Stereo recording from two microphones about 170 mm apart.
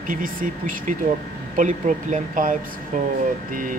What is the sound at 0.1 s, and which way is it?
Speech, 55° right (ahead or behind).